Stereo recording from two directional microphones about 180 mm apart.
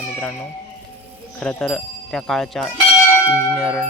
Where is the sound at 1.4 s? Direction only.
5° left (ahead or behind).